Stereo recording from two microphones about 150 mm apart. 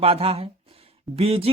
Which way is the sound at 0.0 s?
40° right (ahead or behind).